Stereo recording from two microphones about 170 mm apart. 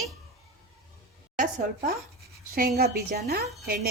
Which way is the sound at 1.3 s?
55° right (ahead or behind).